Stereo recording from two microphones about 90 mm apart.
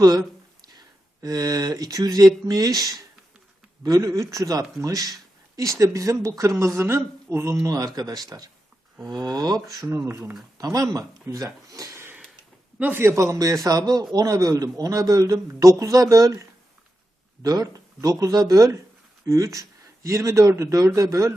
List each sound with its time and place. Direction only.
0.0 s a man's voice: 45° right (ahead or behind)
9.6 s a man's voice: 30° right (ahead or behind)
10.6 s speech: 45° right (ahead or behind)
12.8 s a man's voice: 25° right (ahead or behind)